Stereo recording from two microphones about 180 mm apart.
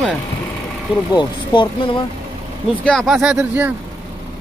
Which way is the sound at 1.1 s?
25° left (ahead or behind).